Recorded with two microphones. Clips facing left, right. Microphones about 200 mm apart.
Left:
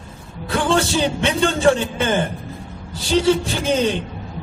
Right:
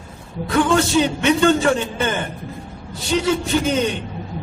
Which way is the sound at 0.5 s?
30° left (ahead or behind).